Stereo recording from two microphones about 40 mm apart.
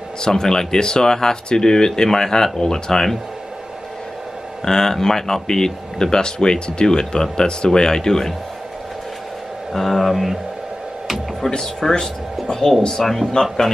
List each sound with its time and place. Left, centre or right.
0.2 s speech: centre
4.6 s speech: centre
9.7 s speech: centre
11.4 s speech: centre
13.3 s speech: centre